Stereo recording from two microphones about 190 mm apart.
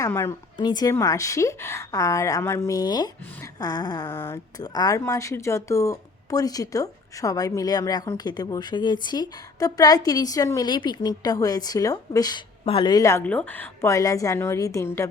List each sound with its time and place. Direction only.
0.0 s a woman's voice: 10° left (ahead or behind)
4.1 s a woman's voice: 10° left (ahead or behind)
4.6 s speech: 20° left (ahead or behind)